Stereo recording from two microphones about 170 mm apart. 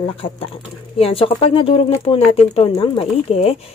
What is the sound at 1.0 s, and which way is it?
Dishes, 35° left (ahead or behind).